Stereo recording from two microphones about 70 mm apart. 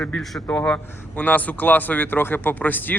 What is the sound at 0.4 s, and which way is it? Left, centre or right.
A man's voice, left.